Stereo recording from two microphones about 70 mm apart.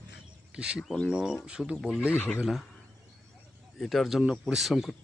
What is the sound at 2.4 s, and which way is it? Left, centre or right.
Speech, centre.